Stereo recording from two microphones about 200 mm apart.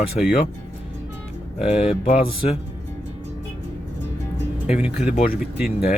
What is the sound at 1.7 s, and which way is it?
Speech, 30° left (ahead or behind).